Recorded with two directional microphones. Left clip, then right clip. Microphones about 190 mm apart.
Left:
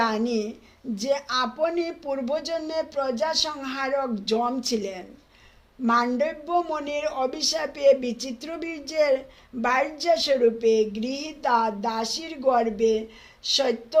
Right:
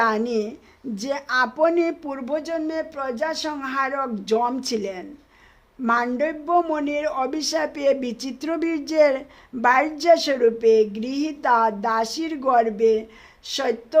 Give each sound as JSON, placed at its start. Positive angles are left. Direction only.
{"t": 0.0, "sound": "speech", "side_deg": -25}